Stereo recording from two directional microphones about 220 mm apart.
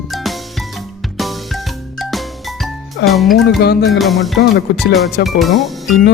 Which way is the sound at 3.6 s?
45° left (ahead or behind).